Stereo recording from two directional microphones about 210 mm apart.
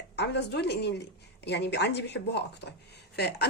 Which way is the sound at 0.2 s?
55° left (ahead or behind).